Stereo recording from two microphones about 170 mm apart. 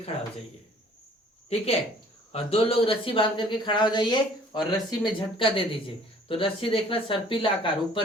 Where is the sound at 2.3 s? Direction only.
35° left (ahead or behind).